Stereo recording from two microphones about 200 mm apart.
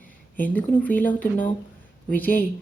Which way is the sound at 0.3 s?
10° left (ahead or behind).